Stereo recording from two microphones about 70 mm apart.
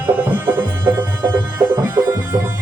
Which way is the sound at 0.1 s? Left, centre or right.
Right.